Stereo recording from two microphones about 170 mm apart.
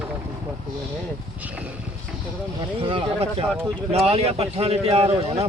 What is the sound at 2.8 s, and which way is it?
Speech, 35° right (ahead or behind).